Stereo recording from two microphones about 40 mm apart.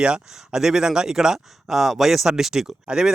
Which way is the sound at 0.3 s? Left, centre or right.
Centre.